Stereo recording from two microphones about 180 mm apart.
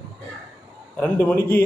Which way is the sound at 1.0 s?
10° left (ahead or behind).